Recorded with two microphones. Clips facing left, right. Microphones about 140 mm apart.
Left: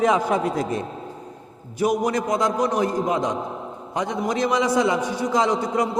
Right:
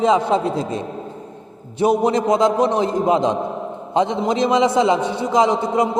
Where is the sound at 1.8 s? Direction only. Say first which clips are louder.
Right 5 dB; 25° right (ahead or behind).